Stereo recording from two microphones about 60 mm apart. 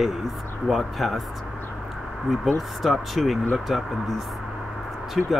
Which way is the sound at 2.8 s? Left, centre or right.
Centre.